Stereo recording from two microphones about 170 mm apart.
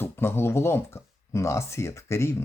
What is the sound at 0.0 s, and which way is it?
Speech, 15° left (ahead or behind).